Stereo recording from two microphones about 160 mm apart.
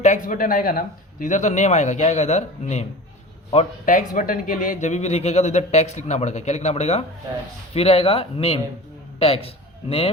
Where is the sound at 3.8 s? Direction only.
55° left (ahead or behind).